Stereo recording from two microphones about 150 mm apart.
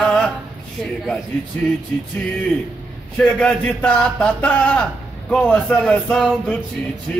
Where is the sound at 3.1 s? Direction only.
5° left (ahead or behind).